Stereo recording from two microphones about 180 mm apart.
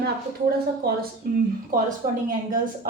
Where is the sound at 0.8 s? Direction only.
55° right (ahead or behind).